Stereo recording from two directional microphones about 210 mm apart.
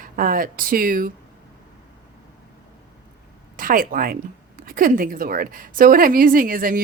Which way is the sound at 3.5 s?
40° right (ahead or behind).